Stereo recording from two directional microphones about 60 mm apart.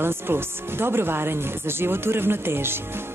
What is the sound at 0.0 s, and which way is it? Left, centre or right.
Speech, right.